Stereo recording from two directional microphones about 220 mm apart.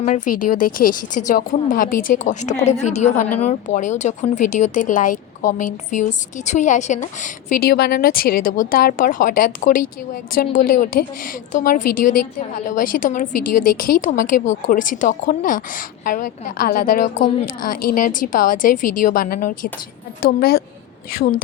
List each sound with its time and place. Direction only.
0.0 s a woman's voice: 35° left (ahead or behind)